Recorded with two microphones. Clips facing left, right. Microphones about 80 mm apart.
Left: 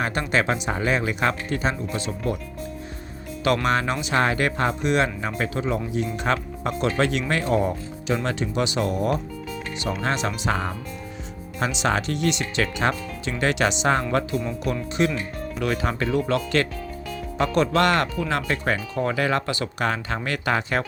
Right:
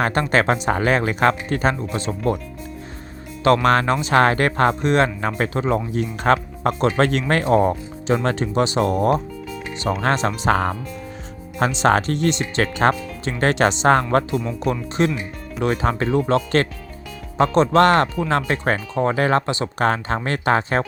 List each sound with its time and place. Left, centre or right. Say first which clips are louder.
0.0 s speech: right 5 dB; right
1.9 s speech: right 3 dB; right
3.4 s speech: right 6 dB; right
4.1 s speech: right 5 dB; right
11.6 s speech: right 6 dB; right